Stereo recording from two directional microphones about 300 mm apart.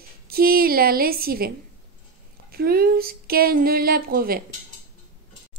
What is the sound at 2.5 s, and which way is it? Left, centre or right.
Speech, right.